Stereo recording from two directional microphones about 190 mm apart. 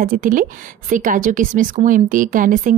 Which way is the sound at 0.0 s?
45° right (ahead or behind).